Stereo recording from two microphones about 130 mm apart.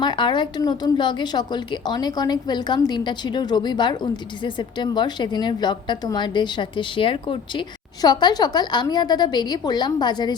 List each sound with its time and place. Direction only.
0.0 s a woman's voice: 35° left (ahead or behind)